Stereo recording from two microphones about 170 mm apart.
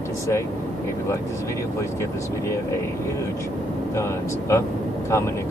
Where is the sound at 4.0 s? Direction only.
15° left (ahead or behind).